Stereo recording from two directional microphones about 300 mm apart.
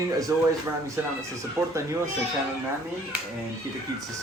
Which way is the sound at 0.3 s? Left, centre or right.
Centre.